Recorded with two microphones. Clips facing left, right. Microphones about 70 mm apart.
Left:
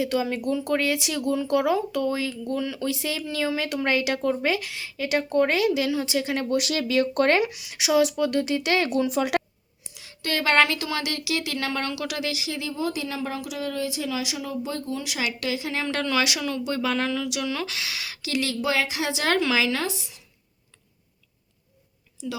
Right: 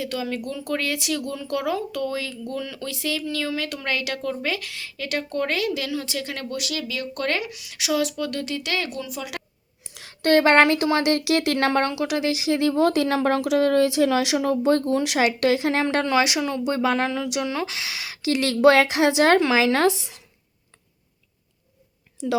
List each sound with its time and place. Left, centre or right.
0.0 s speech: centre
6.6 s speech: left
9.9 s speech: right
11.2 s speech: right
11.9 s a woman's voice: right
12.3 s speech: right
15.8 s a woman's voice: right
18.2 s speech: right
18.5 s speech: right
19.2 s a woman's voice: right
19.8 s speech: right